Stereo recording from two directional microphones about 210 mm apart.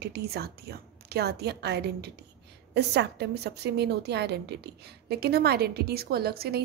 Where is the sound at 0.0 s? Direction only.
50° right (ahead or behind).